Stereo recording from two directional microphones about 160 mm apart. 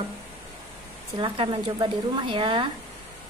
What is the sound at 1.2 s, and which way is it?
A woman's voice, 30° right (ahead or behind).